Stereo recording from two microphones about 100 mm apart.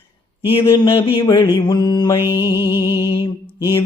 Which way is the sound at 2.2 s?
25° right (ahead or behind).